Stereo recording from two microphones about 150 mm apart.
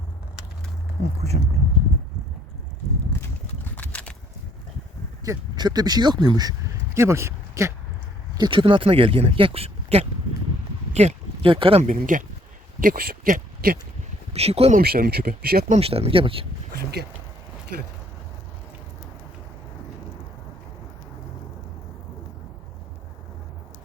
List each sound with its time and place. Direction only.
1.3 s speech: 45° right (ahead or behind)
3.8 s a sound: 10° left (ahead or behind)
5.2 s speech: 25° right (ahead or behind)
8.4 s speech: 35° right (ahead or behind)
11.8 s speech: 60° right (ahead or behind)
12.8 s speech: 75° right (ahead or behind)
14.3 s speech: 40° right (ahead or behind)
14.8 s speech: 90° right
15.7 s speech: 40° right (ahead or behind)